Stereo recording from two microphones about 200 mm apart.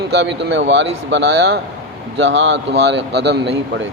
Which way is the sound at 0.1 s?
60° right (ahead or behind).